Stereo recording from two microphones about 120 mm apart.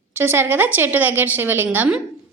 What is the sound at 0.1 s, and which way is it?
A woman's voice, 20° right (ahead or behind).